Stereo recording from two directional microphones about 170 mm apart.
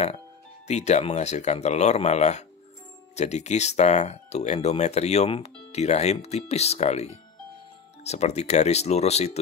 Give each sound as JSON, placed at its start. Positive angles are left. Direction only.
{"t": 0.7, "sound": "speech", "side_deg": 40}